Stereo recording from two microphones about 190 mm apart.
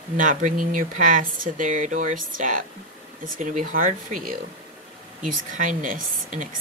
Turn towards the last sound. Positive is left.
turn(degrees=-45)  # may be behind; listen again after turning